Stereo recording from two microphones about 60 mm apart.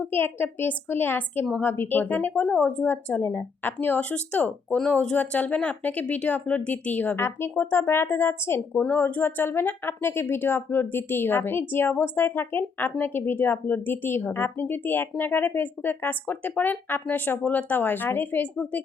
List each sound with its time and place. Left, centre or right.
0.0 s speech: left
7.2 s speech: left
8.7 s speech: left